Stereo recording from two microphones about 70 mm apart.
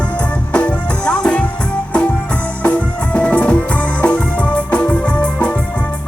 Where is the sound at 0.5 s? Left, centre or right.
Centre.